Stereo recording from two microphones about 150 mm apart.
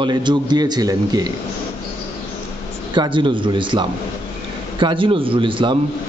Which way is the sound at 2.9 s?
30° right (ahead or behind).